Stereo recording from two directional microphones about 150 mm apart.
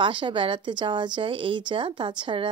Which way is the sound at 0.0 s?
35° right (ahead or behind).